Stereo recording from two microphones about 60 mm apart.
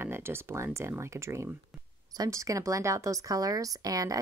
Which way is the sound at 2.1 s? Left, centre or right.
Right.